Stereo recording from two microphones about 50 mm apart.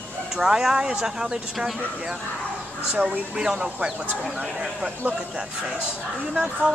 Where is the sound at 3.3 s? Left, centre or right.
Centre.